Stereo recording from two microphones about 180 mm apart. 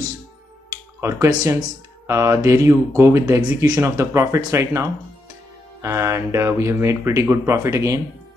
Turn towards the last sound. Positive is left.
turn(degrees=-15)  # may be behind; listen again after turning